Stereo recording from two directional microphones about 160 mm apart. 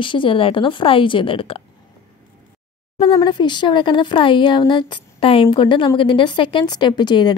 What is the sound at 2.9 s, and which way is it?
A woman's voice, 35° left (ahead or behind).